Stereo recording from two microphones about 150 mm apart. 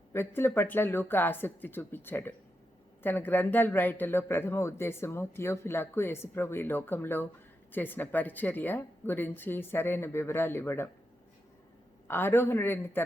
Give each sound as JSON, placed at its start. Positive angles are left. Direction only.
{"t": 0.1, "sound": "a man's voice", "side_deg": 15}
{"t": 12.0, "sound": "a man's voice", "side_deg": 15}